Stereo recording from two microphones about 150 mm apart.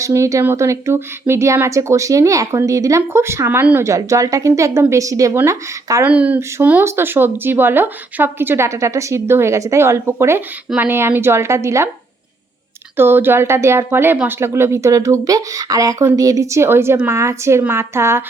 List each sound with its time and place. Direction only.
0.0 s speech: 20° right (ahead or behind)
13.0 s speech: 15° right (ahead or behind)